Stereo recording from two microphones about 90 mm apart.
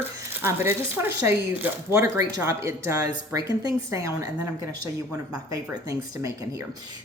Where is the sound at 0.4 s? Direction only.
30° right (ahead or behind).